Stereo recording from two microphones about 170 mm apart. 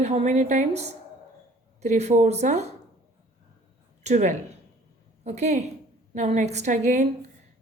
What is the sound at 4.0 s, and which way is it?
A woman's voice, 45° right (ahead or behind).